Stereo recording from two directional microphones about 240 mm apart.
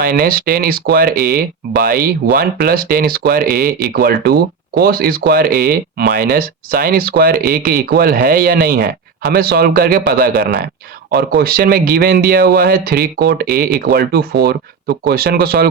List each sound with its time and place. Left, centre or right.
0.0 s speech: right